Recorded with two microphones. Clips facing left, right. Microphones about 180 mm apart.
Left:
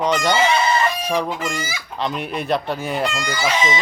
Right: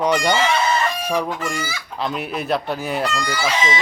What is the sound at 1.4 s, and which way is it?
Fowl, 15° left (ahead or behind).